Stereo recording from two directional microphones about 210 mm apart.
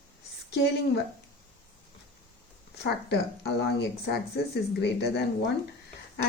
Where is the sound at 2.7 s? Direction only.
50° left (ahead or behind).